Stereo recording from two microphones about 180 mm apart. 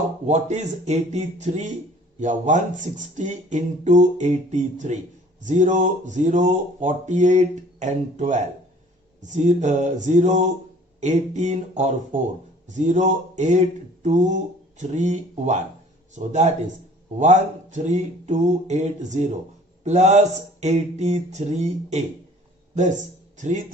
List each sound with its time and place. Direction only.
0.3 s speech: 40° right (ahead or behind)
17.8 s speech: 40° right (ahead or behind)